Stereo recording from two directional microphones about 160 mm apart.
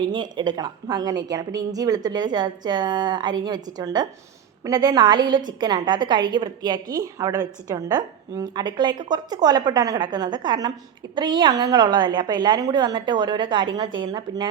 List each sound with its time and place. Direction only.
0.1 s a woman's voice: 30° right (ahead or behind)